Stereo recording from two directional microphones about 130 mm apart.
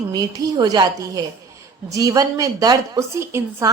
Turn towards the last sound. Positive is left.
turn(degrees=-20)  # may be behind; listen again after turning